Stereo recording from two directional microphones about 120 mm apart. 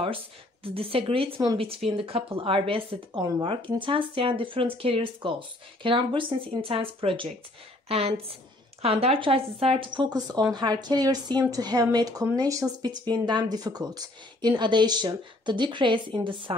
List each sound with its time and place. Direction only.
0.7 s a woman's voice: 50° right (ahead or behind)